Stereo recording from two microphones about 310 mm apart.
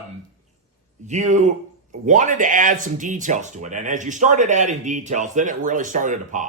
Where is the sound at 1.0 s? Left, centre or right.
Right.